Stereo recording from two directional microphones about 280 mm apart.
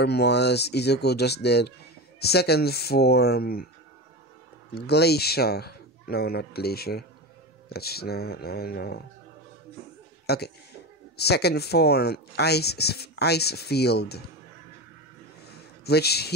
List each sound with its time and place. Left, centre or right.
0.0 s speech: left
4.7 s speech: left
10.2 s a man's voice: left
15.4 s a sound: left